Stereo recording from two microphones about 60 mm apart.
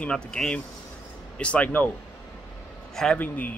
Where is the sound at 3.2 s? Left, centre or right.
Left.